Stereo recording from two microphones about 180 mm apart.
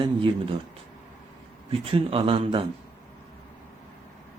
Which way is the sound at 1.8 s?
30° right (ahead or behind).